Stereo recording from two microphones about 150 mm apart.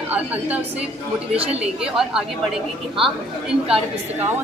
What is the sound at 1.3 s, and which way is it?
Speech, 40° right (ahead or behind).